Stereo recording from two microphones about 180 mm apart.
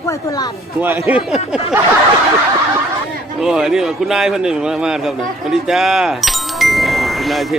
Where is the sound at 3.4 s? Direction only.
5° right (ahead or behind).